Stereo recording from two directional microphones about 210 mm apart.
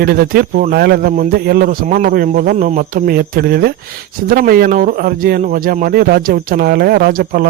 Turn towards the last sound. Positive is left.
turn(degrees=-45)  # may be behind; listen again after turning